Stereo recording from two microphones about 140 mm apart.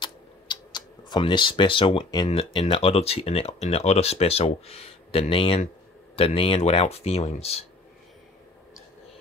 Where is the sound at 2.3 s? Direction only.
40° left (ahead or behind).